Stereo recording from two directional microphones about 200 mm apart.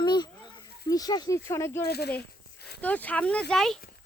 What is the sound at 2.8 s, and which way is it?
Speech, 10° left (ahead or behind).